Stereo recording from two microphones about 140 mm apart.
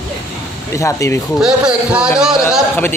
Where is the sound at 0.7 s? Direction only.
20° left (ahead or behind).